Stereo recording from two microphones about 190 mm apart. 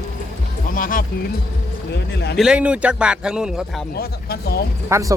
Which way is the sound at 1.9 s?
60° left (ahead or behind).